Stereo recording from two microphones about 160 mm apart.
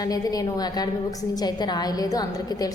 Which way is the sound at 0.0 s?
25° left (ahead or behind).